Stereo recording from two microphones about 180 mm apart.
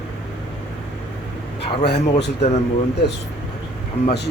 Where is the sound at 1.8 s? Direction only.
65° left (ahead or behind).